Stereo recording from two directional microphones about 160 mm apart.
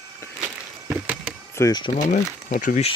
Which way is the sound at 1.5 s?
20° left (ahead or behind).